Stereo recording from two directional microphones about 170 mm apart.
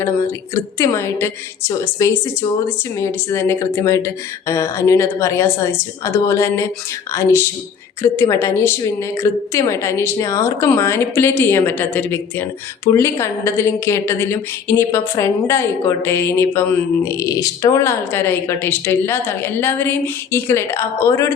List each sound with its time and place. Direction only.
0.5 s a woman's voice: 15° left (ahead or behind)